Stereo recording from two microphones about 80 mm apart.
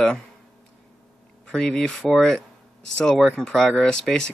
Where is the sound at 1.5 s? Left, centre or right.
Centre.